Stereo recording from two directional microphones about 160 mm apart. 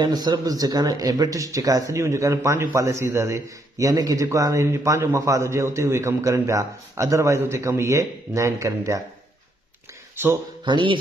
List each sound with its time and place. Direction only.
0.0 s speech: 25° right (ahead or behind)
10.6 s speech: 30° right (ahead or behind)